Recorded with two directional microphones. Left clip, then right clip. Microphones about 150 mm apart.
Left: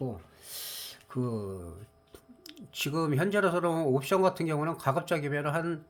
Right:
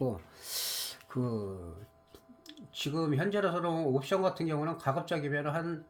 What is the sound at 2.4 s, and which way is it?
Speech, 30° left (ahead or behind).